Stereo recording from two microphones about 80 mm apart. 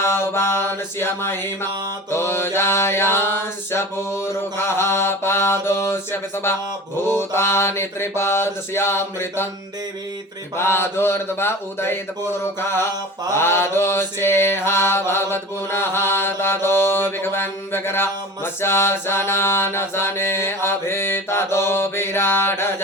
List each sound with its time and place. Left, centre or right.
0.0 s mantra: left
10.6 s mantra: left